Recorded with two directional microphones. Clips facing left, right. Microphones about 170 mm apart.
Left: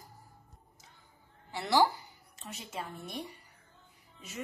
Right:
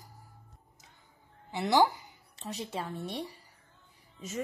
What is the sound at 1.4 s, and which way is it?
Speech, 20° right (ahead or behind).